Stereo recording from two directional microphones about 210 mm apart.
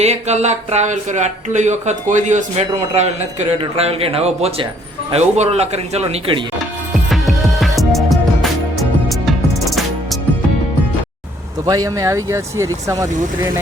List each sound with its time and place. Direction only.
0.0 s speech: 30° right (ahead or behind)
6.9 s music: centre (ahead or behind)
11.6 s speech: 15° right (ahead or behind)